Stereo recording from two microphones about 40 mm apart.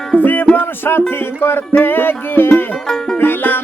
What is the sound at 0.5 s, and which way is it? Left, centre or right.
Music, left.